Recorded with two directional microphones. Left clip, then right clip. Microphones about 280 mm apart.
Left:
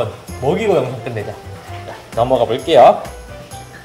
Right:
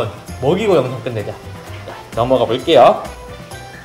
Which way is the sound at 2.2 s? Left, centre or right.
Centre.